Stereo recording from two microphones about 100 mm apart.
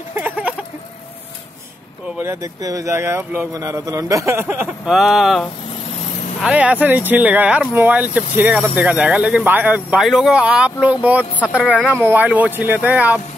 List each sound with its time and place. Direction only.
0.1 s a sound: 15° right (ahead or behind)
2.4 s a man's voice: 35° right (ahead or behind)
4.8 s speech: 5° right (ahead or behind)
6.4 s speech: 15° right (ahead or behind)
9.9 s speech: 5° right (ahead or behind)